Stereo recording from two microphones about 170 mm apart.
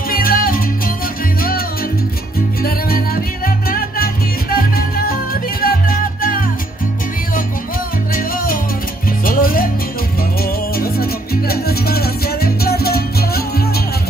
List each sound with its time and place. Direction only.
0.1 s music: 60° left (ahead or behind)
3.4 s music: 60° left (ahead or behind)
9.2 s music: 55° left (ahead or behind)
10.8 s music: 65° left (ahead or behind)